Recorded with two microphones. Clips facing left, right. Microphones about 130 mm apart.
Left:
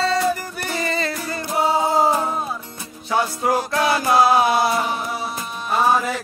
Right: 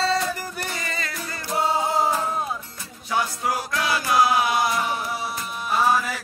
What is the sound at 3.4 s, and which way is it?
Music, 30° left (ahead or behind).